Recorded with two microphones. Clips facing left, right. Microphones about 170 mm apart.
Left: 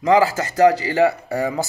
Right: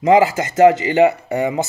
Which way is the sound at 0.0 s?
25° right (ahead or behind).